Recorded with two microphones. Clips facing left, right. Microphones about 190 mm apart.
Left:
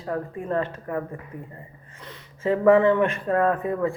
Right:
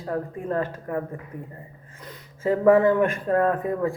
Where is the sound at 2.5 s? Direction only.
45° right (ahead or behind).